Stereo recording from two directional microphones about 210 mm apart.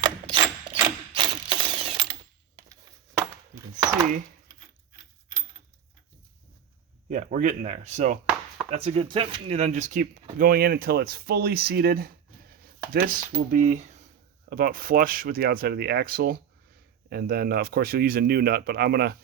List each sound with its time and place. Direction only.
0.0 s mechanisms: 25° right (ahead or behind)
3.2 s chopping: 15° right (ahead or behind)
7.1 s speech: 35° right (ahead or behind)
13.7 s speech: 35° right (ahead or behind)